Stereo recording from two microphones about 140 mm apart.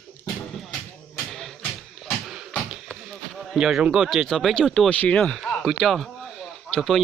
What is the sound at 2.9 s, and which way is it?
Speech, centre (ahead or behind).